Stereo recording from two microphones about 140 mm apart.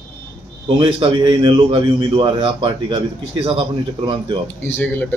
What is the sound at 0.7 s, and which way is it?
A man's voice, 40° right (ahead or behind).